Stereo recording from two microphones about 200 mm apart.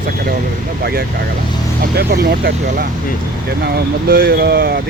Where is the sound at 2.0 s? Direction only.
50° right (ahead or behind).